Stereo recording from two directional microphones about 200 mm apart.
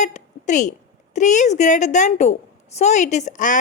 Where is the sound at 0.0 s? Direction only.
35° left (ahead or behind).